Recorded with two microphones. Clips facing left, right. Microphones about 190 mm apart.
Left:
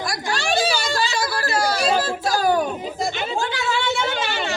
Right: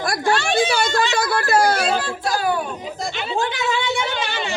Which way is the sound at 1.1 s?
55° right (ahead or behind).